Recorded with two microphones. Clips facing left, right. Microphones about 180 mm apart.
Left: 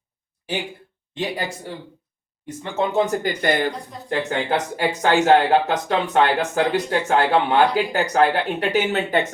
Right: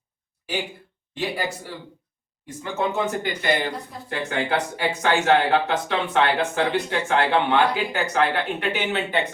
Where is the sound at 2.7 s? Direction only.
30° left (ahead or behind).